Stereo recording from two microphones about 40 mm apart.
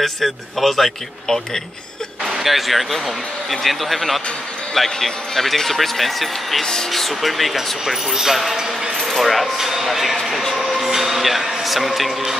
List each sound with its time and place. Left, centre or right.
0.0 s speech: centre
1.2 s speech: centre
2.2 s speech: centre
6.6 s speech: centre
6.9 s speech: centre
7.8 s speech: centre
9.0 s speech: centre
10.6 s music: centre
11.6 s speech: centre